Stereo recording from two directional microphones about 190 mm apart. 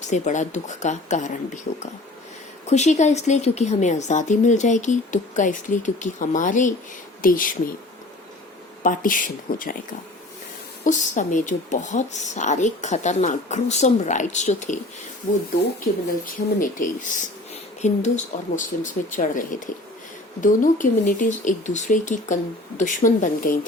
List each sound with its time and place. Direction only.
0.0 s speech: 40° left (ahead or behind)
2.6 s speech: 35° left (ahead or behind)
8.8 s speech: 45° left (ahead or behind)
10.8 s speech: 40° left (ahead or behind)
16.2 s speech: 45° left (ahead or behind)